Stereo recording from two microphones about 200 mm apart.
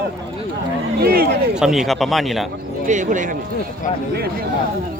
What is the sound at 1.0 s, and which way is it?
Speech, 50° right (ahead or behind).